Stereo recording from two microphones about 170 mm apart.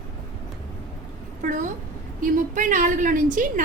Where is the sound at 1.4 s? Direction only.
50° right (ahead or behind).